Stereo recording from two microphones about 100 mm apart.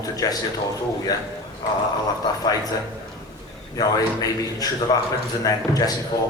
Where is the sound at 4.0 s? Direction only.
35° left (ahead or behind).